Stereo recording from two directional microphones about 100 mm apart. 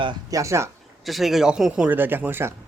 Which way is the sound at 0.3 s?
30° right (ahead or behind).